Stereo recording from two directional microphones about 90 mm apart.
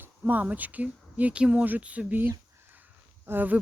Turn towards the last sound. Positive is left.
turn(degrees=-20)  # may be behind; listen again after turning